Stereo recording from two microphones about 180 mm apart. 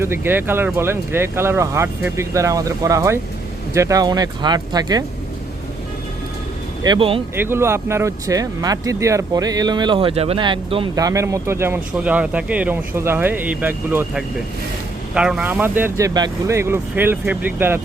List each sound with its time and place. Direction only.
0.0 s speech: 10° right (ahead or behind)
6.8 s speech: 25° right (ahead or behind)
7.3 s speech: 15° right (ahead or behind); by 10.8 s 30° right (ahead or behind)
10.9 s speech: 20° right (ahead or behind)